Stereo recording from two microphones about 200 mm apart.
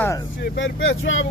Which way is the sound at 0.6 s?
75° left (ahead or behind).